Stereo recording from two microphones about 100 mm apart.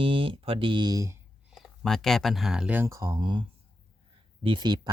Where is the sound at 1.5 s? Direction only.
5° left (ahead or behind).